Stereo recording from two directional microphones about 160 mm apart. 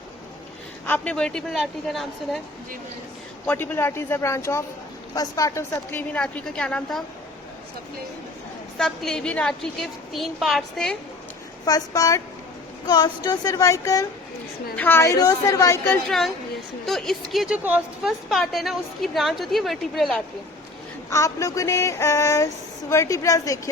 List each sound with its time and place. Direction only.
0.9 s a woman's voice: 10° left (ahead or behind)
3.4 s a woman's voice: 10° left (ahead or behind)
8.8 s a woman's voice: centre (ahead or behind)
11.6 s female singing: 20° left (ahead or behind)
14.8 s a woman's voice: 15° left (ahead or behind)
16.0 s a woman's voice: centre (ahead or behind)
21.1 s a woman's voice: 20° left (ahead or behind)
22.9 s female singing: 20° left (ahead or behind)